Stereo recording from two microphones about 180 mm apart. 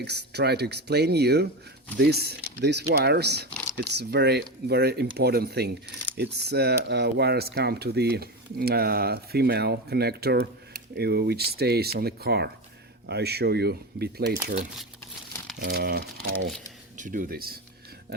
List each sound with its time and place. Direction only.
0.0 s speech: 65° right (ahead or behind)
15.6 s speech: 60° right (ahead or behind)